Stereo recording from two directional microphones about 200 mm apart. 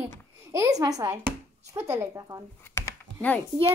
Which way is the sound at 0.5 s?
15° right (ahead or behind).